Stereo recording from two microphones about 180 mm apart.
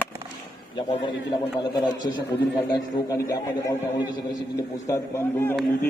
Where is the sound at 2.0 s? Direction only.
20° left (ahead or behind).